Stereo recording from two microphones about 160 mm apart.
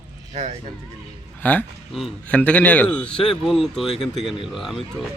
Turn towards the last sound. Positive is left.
turn(degrees=0)  # may be behind; listen again after turning